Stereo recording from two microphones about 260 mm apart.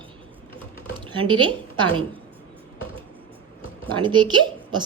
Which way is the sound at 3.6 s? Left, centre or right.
Centre.